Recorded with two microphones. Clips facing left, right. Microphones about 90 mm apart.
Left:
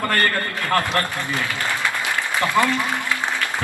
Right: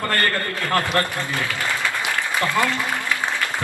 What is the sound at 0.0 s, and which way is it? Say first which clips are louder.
Speech: left 2 dB; 20° left (ahead or behind).